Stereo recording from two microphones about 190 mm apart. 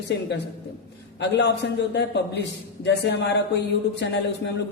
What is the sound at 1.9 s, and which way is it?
A man's voice, 65° left (ahead or behind).